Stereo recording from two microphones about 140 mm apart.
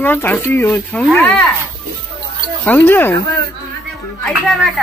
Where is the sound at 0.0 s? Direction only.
15° left (ahead or behind).